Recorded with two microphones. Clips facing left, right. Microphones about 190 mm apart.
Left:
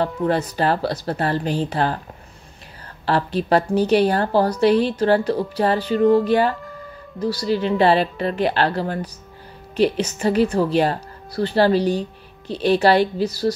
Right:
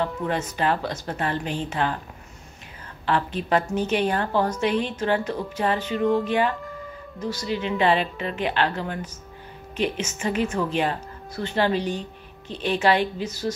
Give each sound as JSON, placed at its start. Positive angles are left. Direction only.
{"t": 0.0, "sound": "a woman's voice", "side_deg": 35}
{"t": 3.1, "sound": "a woman's voice", "side_deg": 35}